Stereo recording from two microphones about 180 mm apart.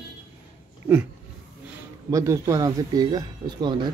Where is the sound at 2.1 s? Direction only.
20° right (ahead or behind).